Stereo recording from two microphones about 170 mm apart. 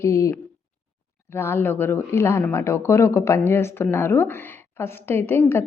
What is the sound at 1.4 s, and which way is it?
A woman's voice, 15° left (ahead or behind).